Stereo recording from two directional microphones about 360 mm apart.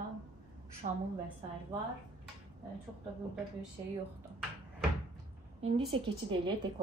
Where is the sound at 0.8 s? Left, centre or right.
Right.